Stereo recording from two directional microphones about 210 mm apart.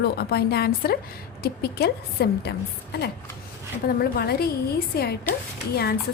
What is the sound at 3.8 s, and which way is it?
A woman's voice, 45° left (ahead or behind).